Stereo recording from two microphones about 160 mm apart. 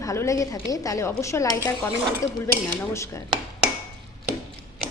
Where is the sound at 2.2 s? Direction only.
15° left (ahead or behind).